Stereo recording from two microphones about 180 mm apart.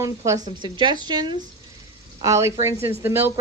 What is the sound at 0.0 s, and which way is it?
Speech, 20° right (ahead or behind).